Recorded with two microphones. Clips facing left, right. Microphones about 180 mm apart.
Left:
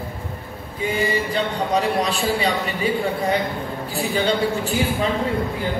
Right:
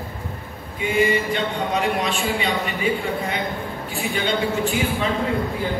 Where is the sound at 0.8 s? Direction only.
40° left (ahead or behind).